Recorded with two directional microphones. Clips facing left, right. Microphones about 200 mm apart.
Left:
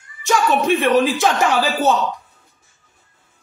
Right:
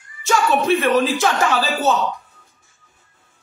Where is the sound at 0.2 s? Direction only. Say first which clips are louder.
Left 1 dB; 15° left (ahead or behind).